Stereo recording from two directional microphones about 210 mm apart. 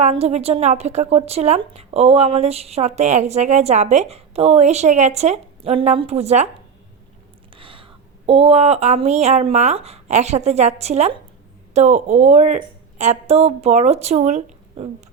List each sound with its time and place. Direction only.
0.0 s a woman's voice: 30° right (ahead or behind)
7.5 s a sound: 25° right (ahead or behind)
8.3 s a woman's voice: 25° right (ahead or behind)